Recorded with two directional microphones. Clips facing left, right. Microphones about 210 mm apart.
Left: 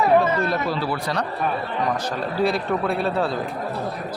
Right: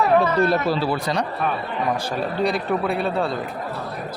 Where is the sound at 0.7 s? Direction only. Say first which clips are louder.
Right 3 dB; 20° right (ahead or behind).